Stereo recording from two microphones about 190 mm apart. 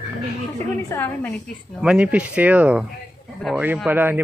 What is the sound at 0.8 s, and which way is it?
Speech, 10° left (ahead or behind).